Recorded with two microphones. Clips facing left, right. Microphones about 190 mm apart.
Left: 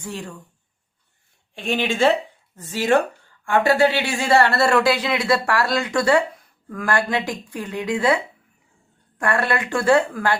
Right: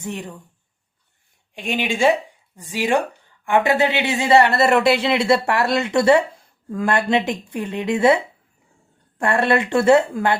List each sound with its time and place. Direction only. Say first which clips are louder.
0.0 s speech: right 2 dB; 20° right (ahead or behind)
1.5 s speech: left 1 dB; 15° right (ahead or behind)